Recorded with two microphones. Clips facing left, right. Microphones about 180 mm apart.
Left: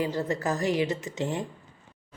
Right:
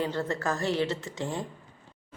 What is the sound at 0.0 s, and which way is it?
Speech, 15° left (ahead or behind).